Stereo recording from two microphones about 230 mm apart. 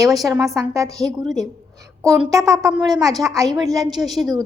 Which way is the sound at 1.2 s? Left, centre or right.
Centre.